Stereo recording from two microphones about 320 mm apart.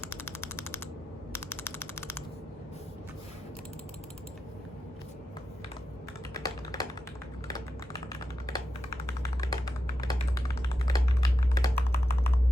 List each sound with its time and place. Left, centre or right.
0.1 s mechanisms: centre
6.4 s tap: centre
8.1 s typing: centre